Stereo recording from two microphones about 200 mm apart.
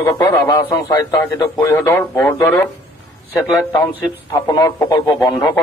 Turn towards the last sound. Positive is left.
turn(degrees=20)  # may be behind; listen again after turning